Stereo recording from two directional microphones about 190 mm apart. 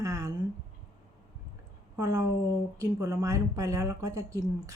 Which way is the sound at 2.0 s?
15° right (ahead or behind).